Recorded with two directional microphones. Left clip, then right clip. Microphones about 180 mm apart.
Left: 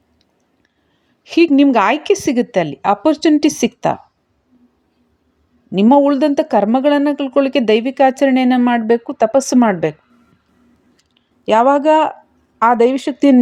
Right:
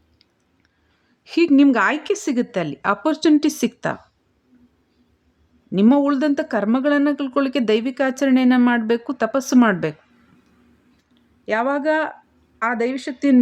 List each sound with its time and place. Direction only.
1.2 s a sound: 15° left (ahead or behind)
1.5 s speech: 15° left (ahead or behind)
5.9 s speech: 15° left (ahead or behind)
11.1 s speech: 25° left (ahead or behind)